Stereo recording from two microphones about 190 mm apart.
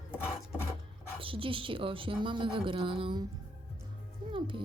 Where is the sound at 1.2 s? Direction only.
25° right (ahead or behind).